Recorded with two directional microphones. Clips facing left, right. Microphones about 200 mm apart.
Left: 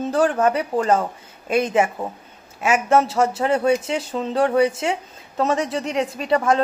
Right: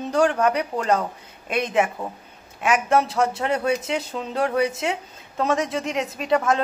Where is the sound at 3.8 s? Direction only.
25° left (ahead or behind).